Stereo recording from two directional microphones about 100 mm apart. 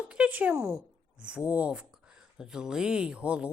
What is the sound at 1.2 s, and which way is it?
Speech, 10° right (ahead or behind).